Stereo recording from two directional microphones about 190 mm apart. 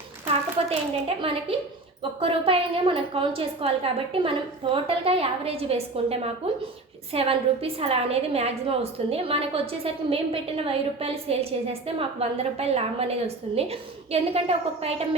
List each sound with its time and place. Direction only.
0.7 s a woman's voice: 30° right (ahead or behind)